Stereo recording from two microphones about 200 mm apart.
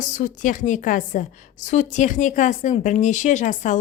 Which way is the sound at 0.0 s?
40° left (ahead or behind).